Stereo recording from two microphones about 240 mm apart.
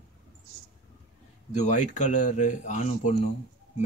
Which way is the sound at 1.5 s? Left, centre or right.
Left.